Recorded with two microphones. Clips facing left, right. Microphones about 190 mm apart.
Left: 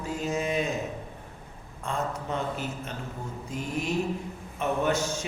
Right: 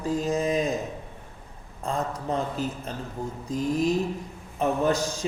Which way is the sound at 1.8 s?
35° right (ahead or behind).